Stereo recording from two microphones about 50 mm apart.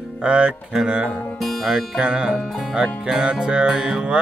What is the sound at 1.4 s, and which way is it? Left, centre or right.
Music, centre.